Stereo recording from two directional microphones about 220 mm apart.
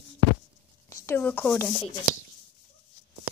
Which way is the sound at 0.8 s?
10° left (ahead or behind).